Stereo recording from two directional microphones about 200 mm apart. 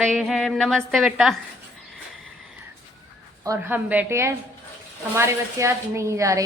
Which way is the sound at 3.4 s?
15° right (ahead or behind).